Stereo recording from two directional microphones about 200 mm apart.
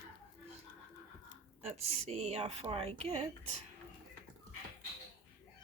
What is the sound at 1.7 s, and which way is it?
A woman's voice, 30° right (ahead or behind).